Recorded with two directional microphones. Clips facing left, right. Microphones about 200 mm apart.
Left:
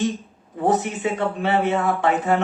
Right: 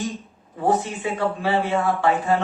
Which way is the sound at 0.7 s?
20° left (ahead or behind).